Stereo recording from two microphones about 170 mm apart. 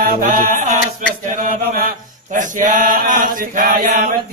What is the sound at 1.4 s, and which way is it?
Mantra, 55° right (ahead or behind).